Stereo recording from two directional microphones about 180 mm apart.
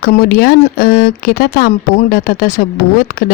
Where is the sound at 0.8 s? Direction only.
55° left (ahead or behind).